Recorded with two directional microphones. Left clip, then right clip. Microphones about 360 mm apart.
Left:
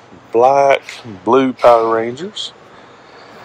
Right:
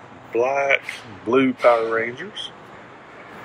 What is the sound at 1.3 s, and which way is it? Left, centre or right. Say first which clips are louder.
Speech: left 7 dB; centre.